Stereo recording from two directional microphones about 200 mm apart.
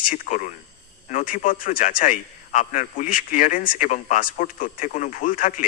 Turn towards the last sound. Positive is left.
turn(degrees=40)  # may be behind; listen again after turning